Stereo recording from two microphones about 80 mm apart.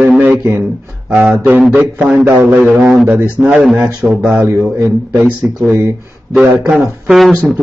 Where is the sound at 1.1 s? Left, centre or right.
Centre.